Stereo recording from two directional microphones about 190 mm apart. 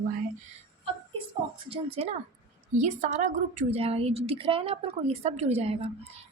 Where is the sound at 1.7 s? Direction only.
30° right (ahead or behind).